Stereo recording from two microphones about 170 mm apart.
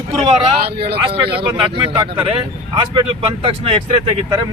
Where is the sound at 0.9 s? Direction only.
30° right (ahead or behind).